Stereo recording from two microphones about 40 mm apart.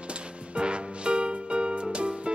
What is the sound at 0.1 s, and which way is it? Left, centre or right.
Music, right.